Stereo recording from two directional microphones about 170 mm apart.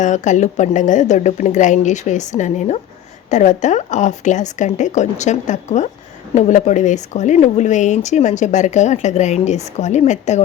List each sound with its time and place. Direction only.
0.0 s speech: 45° left (ahead or behind)